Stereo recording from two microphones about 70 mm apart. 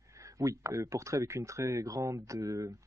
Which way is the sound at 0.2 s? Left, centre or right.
Right.